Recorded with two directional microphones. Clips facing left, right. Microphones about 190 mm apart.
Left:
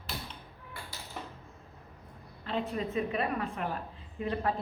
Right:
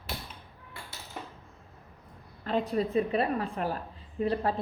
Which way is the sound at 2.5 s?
45° right (ahead or behind).